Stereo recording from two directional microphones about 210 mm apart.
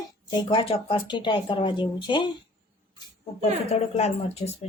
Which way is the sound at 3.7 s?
30° left (ahead or behind).